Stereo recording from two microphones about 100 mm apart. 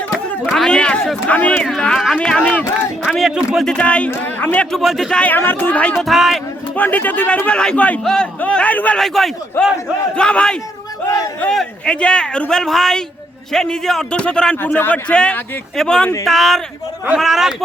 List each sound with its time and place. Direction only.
0.4 s a sound: 5° left (ahead or behind)
1.3 s a man's voice: 15° left (ahead or behind)
3.2 s a man's voice: centre (ahead or behind)
4.8 s a man's voice: centre (ahead or behind)
5.1 s a man's voice: 15° left (ahead or behind)
6.1 s a man's voice: centre (ahead or behind)
6.7 s a man's voice: 15° left (ahead or behind)
9.0 s a man's voice: centre (ahead or behind)